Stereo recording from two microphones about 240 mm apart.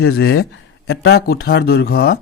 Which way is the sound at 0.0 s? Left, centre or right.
Left.